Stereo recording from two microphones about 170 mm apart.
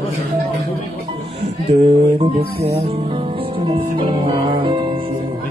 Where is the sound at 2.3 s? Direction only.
65° right (ahead or behind).